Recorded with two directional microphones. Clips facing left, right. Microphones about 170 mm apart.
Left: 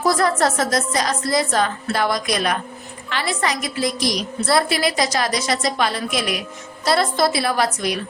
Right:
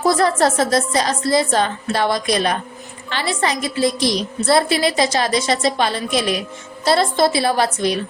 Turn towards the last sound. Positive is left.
turn(degrees=-30)  # may be behind; listen again after turning